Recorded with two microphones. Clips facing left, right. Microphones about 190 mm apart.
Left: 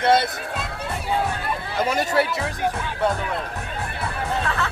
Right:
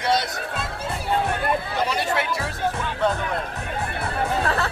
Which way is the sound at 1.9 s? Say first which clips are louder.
Left 7 dB; 40° left (ahead or behind).